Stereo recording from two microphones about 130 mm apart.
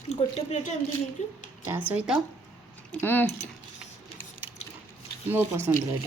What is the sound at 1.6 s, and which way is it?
Speech, 15° right (ahead or behind).